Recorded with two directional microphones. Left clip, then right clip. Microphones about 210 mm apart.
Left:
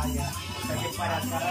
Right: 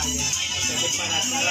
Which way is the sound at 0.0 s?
55° left (ahead or behind).